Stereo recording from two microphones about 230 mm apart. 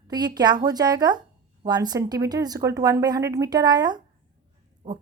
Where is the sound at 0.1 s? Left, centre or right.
Centre.